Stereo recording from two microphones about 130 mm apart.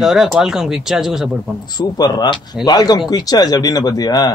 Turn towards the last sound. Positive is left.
turn(degrees=30)  # may be behind; listen again after turning